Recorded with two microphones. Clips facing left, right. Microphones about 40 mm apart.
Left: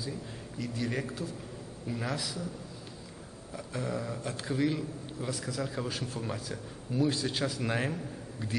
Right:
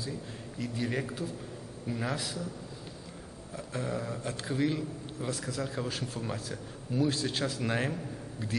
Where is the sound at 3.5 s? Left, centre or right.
Centre.